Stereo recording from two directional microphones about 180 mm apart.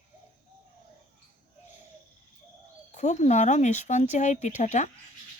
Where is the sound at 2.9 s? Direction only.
40° left (ahead or behind).